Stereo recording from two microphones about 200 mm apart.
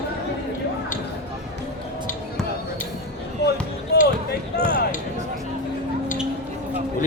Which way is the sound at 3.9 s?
55° left (ahead or behind).